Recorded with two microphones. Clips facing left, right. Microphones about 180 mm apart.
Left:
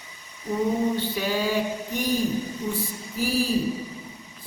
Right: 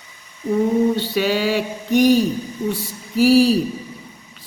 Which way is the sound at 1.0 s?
80° right.